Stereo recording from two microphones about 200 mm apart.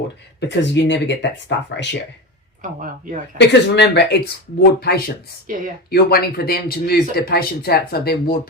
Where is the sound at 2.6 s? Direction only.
40° right (ahead or behind).